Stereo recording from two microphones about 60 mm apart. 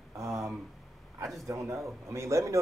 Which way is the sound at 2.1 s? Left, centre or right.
Right.